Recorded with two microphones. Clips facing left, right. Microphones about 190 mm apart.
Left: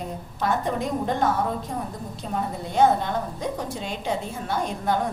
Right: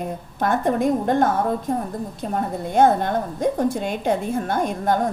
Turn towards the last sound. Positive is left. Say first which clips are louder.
# right 4 dB
turn(degrees=-50)  # may be behind; listen again after turning